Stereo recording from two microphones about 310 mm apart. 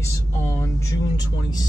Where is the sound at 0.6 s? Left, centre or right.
Centre.